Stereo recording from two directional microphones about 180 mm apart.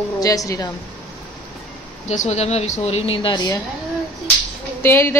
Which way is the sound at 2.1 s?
40° left (ahead or behind).